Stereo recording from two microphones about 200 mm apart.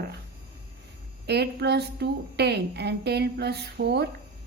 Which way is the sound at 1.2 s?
55° right (ahead or behind).